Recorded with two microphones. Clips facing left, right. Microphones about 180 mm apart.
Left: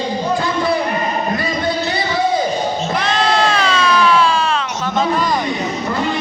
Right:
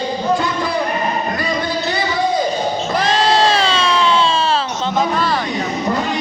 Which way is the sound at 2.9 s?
35° right (ahead or behind).